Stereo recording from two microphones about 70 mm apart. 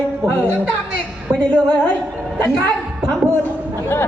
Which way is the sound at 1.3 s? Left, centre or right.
Centre.